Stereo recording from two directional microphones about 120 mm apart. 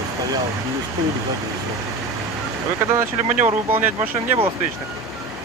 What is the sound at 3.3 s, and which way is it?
Speech, 15° right (ahead or behind).